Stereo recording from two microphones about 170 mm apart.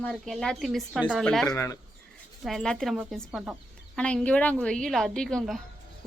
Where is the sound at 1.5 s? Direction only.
15° left (ahead or behind).